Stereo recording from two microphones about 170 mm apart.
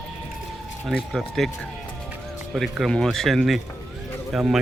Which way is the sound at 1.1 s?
Centre (ahead or behind).